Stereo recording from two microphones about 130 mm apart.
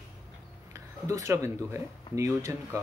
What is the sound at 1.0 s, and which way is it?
Speech, 25° right (ahead or behind).